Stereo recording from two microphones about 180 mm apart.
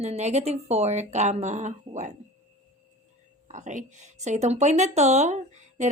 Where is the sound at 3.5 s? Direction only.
40° right (ahead or behind).